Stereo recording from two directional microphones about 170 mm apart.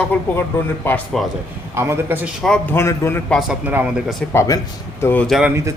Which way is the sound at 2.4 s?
5° left (ahead or behind).